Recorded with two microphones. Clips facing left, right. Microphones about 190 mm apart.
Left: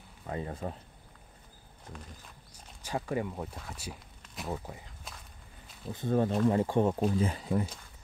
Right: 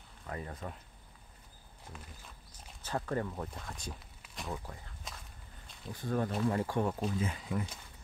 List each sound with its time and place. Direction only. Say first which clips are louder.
0.3 s speech: left 5 dB; 25° left (ahead or behind)
1.9 s speech: left 3 dB; 5° right (ahead or behind)
2.8 s speech: left 2 dB; 10° left (ahead or behind)
5.9 s speech: left 6 dB; 25° left (ahead or behind)
7.0 s speech: left 6 dB; 35° left (ahead or behind)